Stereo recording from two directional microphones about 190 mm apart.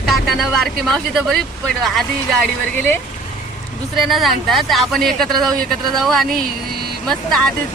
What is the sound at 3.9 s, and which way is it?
Speech, centre (ahead or behind).